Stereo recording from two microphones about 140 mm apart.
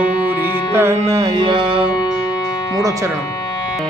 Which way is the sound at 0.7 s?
20° right (ahead or behind).